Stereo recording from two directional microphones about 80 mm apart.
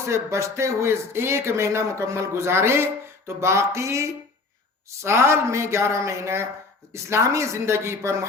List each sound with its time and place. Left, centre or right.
0.0 s speech: right